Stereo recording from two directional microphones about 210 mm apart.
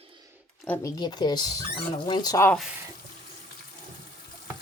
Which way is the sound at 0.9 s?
20° left (ahead or behind).